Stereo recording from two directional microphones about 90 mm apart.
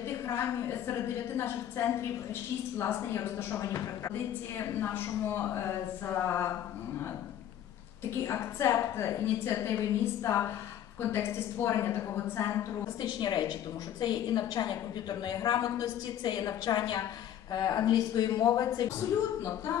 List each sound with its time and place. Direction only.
0.3 s a woman's voice: 25° left (ahead or behind)
8.3 s a woman's voice: 30° left (ahead or behind)
13.0 s a woman's voice: 50° left (ahead or behind)
16.3 s a woman's voice: 55° left (ahead or behind); by 18.7 s 35° left (ahead or behind)